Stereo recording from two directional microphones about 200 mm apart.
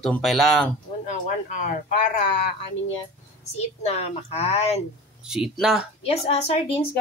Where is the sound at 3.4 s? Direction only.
35° left (ahead or behind).